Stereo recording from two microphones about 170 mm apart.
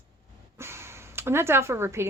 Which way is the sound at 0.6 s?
15° right (ahead or behind).